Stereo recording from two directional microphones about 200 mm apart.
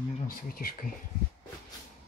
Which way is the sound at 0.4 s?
45° left (ahead or behind).